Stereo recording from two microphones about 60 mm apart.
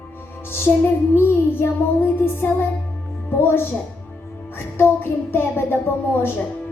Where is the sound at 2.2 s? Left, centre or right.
Left.